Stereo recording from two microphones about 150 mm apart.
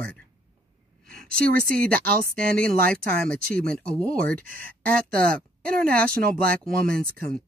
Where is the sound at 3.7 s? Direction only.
5° left (ahead or behind).